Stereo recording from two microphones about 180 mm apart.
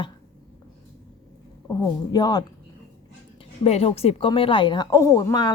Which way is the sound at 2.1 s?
20° left (ahead or behind).